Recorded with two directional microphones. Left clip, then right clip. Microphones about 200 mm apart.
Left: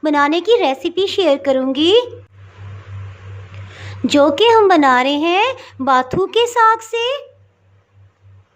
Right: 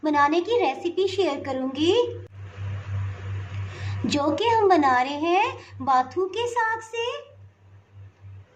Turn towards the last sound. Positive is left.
turn(degrees=50)  # may be behind; listen again after turning